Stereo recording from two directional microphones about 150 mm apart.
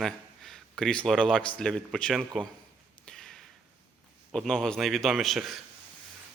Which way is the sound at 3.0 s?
5° left (ahead or behind).